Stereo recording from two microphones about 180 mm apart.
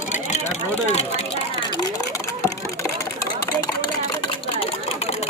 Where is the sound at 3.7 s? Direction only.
20° left (ahead or behind).